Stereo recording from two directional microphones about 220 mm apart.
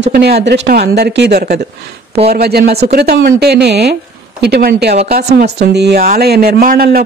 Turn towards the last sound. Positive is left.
turn(degrees=-45)  # may be behind; listen again after turning